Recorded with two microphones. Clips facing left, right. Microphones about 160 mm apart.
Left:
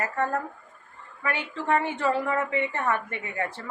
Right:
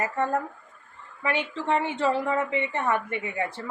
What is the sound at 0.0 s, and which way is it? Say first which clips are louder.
A woman's voice: right 1 dB; 20° right (ahead or behind).